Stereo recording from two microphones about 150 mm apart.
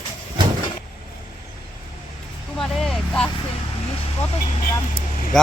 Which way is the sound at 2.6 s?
Centre (ahead or behind).